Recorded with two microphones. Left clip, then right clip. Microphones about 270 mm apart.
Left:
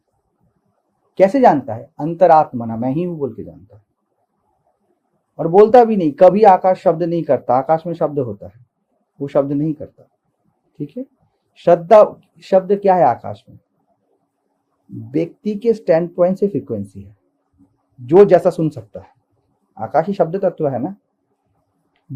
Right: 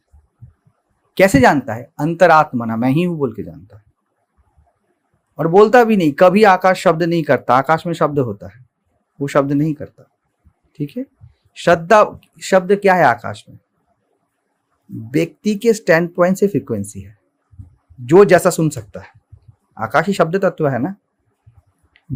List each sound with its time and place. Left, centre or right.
1.1 s speech: right
5.6 s speech: right
15.1 s speech: right
18.1 s speech: right
22.0 s heart sounds: right